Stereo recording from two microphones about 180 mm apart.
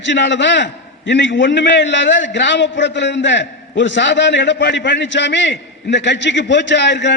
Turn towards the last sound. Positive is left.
turn(degrees=75)  # may be behind; listen again after turning